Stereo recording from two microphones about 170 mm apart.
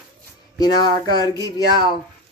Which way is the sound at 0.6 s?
25° left (ahead or behind).